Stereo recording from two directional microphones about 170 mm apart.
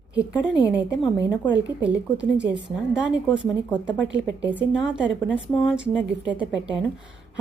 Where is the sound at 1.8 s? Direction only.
5° right (ahead or behind).